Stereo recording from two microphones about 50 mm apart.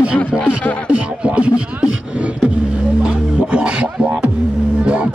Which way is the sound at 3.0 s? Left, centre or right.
Right.